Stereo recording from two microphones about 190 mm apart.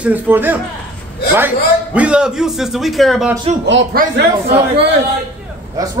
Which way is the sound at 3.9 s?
55° right (ahead or behind).